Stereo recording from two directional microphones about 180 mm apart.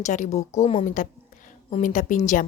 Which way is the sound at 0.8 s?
45° left (ahead or behind).